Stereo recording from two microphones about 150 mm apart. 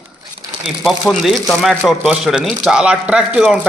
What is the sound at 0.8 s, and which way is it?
A man's voice, centre (ahead or behind).